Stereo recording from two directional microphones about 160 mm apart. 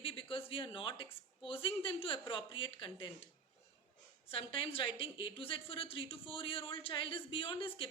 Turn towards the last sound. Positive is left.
turn(degrees=35)  # may be behind; listen again after turning